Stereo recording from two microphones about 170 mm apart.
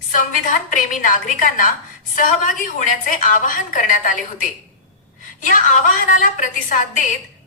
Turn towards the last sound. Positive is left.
turn(degrees=50)  # may be behind; listen again after turning